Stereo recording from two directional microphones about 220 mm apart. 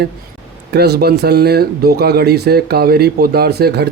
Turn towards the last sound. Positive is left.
turn(degrees=-50)  # may be behind; listen again after turning